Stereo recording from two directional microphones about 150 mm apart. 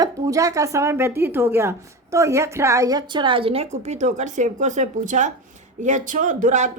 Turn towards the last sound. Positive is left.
turn(degrees=-55)  # may be behind; listen again after turning